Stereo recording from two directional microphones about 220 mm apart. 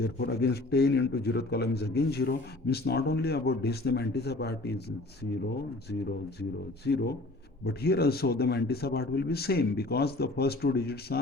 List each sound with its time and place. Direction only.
0.0 s a man's voice: 45° left (ahead or behind)
6.8 s a man's voice: 50° left (ahead or behind)